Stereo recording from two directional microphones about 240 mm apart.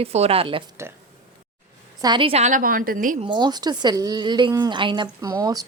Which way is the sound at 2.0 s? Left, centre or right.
Centre.